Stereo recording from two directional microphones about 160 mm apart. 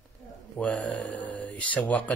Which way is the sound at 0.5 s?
5° left (ahead or behind).